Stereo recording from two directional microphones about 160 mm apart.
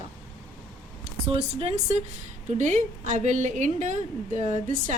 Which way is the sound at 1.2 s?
35° right (ahead or behind).